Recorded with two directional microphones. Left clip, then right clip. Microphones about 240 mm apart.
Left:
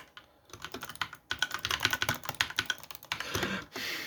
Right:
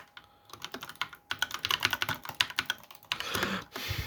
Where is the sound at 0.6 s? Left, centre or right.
Right.